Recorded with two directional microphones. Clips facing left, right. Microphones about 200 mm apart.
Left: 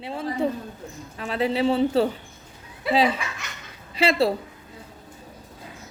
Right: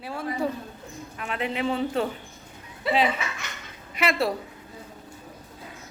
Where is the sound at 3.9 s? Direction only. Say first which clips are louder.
Left 4 dB; 30° left (ahead or behind).